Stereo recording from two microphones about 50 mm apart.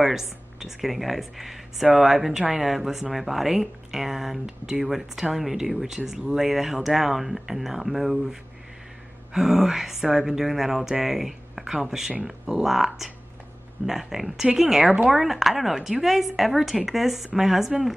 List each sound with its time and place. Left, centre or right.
0.0 s speech: centre